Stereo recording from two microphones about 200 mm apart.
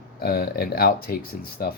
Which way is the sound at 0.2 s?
50° left (ahead or behind).